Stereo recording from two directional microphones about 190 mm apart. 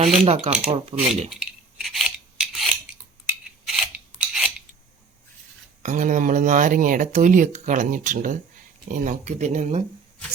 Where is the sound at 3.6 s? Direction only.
Centre (ahead or behind).